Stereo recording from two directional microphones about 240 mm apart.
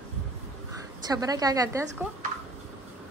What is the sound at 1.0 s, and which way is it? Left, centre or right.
Speech, centre.